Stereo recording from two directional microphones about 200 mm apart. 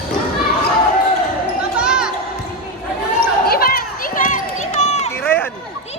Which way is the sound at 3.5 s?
50° left (ahead or behind).